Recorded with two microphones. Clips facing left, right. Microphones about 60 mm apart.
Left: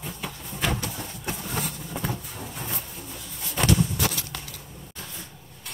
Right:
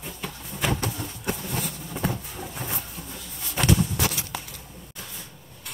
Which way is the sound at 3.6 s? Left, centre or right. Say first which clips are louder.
Even; centre.